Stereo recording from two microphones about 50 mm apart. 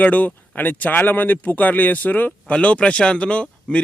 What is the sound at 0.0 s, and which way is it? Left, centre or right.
A man's voice, left.